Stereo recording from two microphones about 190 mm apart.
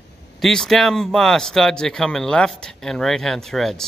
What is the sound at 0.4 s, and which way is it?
Speech, centre (ahead or behind).